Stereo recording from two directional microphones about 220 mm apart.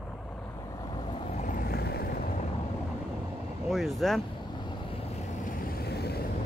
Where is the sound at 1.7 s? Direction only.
45° left (ahead or behind).